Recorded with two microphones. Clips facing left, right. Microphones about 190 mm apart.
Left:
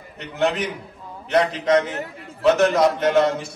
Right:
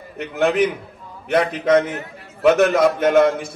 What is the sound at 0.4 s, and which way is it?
Speech, 55° right (ahead or behind).